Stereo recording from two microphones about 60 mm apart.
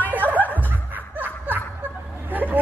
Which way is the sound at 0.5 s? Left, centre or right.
Right.